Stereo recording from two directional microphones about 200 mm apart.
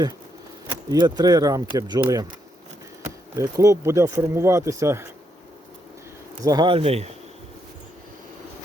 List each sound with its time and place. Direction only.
0.7 s speech: 20° right (ahead or behind)
3.3 s speech: 15° right (ahead or behind)
6.4 s speech: 20° right (ahead or behind)